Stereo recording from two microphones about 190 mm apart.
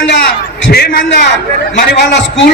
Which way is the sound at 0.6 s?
55° left (ahead or behind).